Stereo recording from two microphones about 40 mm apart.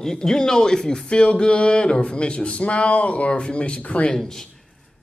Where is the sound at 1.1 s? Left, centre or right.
Left.